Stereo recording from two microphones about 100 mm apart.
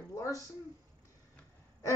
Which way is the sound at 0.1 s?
35° left (ahead or behind).